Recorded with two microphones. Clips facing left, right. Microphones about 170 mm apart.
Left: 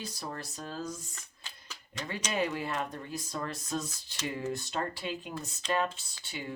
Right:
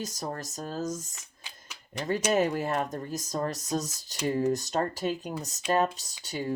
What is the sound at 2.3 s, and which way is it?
Speech, 45° right (ahead or behind).